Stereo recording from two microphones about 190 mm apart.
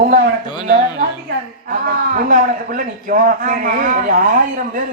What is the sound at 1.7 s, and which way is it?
A man's voice, 45° right (ahead or behind).